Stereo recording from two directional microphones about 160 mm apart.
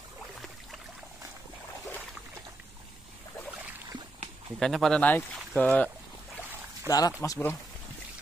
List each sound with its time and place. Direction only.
4.6 s speech: 5° left (ahead or behind)
6.9 s speech: 20° left (ahead or behind)